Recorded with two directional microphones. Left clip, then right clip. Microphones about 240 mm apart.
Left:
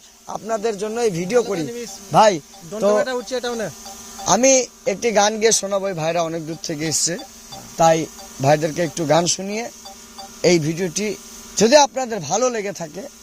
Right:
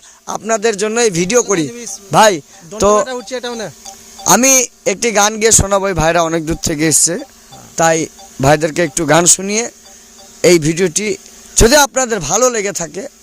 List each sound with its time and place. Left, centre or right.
0.3 s a man's voice: right
3.0 s speech: right
4.3 s a man's voice: right